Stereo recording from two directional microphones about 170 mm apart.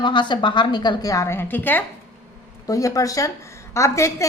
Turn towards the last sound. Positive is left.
turn(degrees=15)  # may be behind; listen again after turning